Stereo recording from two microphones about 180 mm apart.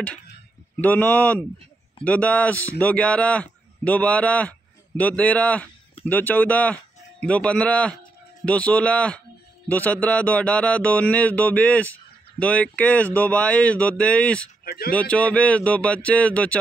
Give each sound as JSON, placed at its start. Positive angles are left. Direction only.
{"t": 0.7, "sound": "music", "side_deg": 10}
{"t": 2.8, "sound": "a man's voice", "side_deg": 5}
{"t": 8.5, "sound": "music", "side_deg": 5}
{"t": 14.6, "sound": "speech", "side_deg": 55}
{"t": 15.0, "sound": "music", "side_deg": 5}